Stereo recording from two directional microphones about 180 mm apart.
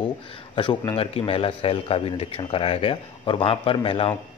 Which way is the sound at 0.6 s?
30° left (ahead or behind).